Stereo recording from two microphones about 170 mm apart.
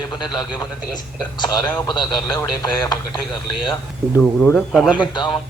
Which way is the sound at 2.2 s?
15° left (ahead or behind).